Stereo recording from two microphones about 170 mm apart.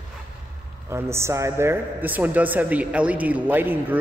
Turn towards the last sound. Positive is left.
turn(degrees=-10)  # may be behind; listen again after turning